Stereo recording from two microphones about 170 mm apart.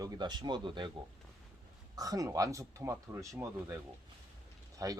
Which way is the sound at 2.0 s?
20° right (ahead or behind).